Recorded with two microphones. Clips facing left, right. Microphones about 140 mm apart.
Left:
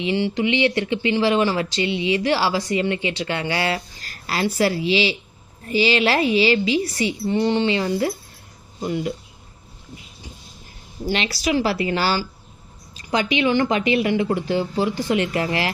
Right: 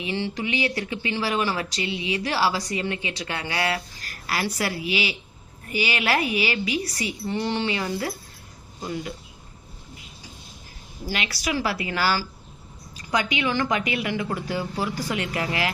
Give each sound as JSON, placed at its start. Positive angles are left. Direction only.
{"t": 0.0, "sound": "speech", "side_deg": 20}
{"t": 11.0, "sound": "speech", "side_deg": 25}